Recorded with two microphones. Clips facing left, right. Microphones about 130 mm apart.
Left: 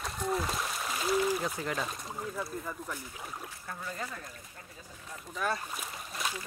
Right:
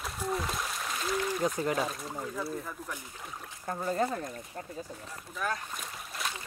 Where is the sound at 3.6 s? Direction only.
40° right (ahead or behind).